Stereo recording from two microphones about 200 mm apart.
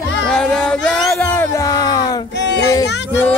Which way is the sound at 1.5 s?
15° left (ahead or behind).